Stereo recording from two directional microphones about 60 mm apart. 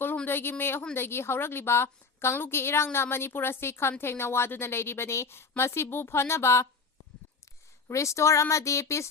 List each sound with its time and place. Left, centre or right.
0.3 s a woman's voice: left
7.9 s speech: left